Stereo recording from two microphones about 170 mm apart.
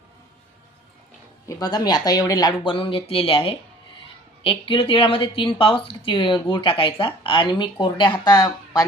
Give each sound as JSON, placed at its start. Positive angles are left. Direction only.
{"t": 1.5, "sound": "a woman's voice", "side_deg": 20}